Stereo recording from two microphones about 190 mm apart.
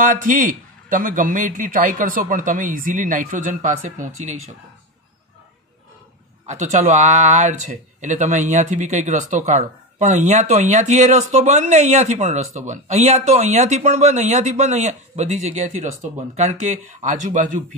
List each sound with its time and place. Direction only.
0.0 s a man's voice: 45° right (ahead or behind)
6.4 s speech: 40° right (ahead or behind)